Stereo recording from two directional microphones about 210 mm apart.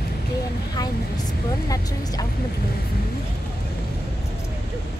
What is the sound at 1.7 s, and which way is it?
Speech, 15° left (ahead or behind).